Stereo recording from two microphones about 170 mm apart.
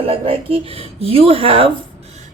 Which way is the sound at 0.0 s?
35° right (ahead or behind).